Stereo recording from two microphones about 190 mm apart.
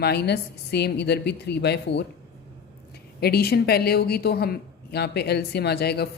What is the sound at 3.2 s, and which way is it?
Speech, 55° left (ahead or behind).